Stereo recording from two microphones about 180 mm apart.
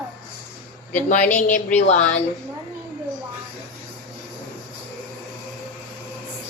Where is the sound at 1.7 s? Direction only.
40° left (ahead or behind).